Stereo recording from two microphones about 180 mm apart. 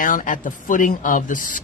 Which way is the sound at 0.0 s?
50° left (ahead or behind).